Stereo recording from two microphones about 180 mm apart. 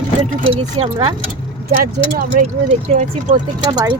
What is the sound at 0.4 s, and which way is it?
Speech, 30° right (ahead or behind).